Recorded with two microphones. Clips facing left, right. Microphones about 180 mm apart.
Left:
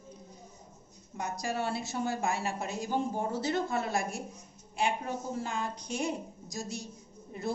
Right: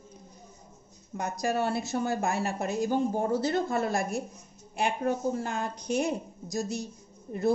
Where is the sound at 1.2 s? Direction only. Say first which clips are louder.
Right 5 dB; 60° right (ahead or behind).